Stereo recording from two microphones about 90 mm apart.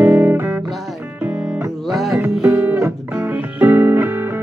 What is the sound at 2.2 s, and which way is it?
Music, 30° right (ahead or behind).